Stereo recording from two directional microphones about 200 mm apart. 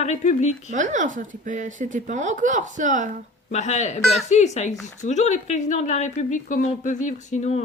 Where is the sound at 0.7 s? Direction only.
40° right (ahead or behind).